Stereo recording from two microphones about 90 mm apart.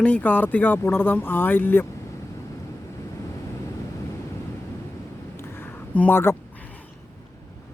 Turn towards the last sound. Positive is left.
turn(degrees=25)  # may be behind; listen again after turning